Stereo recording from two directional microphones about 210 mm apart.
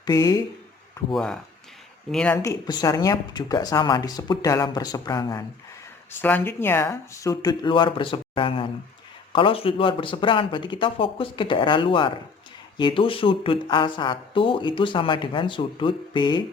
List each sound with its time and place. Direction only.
0.0 s speech: 15° left (ahead or behind)
1.1 s speech: 5° left (ahead or behind); by 16.4 s 20° left (ahead or behind)